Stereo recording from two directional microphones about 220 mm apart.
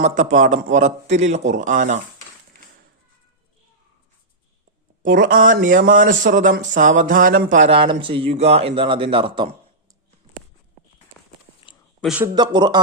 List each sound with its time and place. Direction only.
0.0 s speech: 35° right (ahead or behind)
5.0 s speech: 40° right (ahead or behind); by 9.6 s 25° right (ahead or behind)
11.9 s speech: 5° right (ahead or behind)
12.3 s speech: 20° right (ahead or behind)